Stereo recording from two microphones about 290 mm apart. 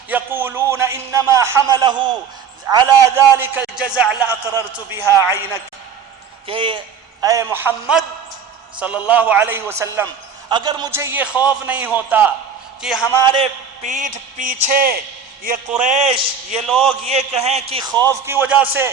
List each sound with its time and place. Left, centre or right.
0.1 s a sound: centre
2.6 s a man's voice: centre
6.5 s a man's voice: centre
9.0 s a man's voice: centre
13.2 s a man's voice: centre
16.6 s a man's voice: centre
17.1 s a man's voice: right; by 18.9 s centre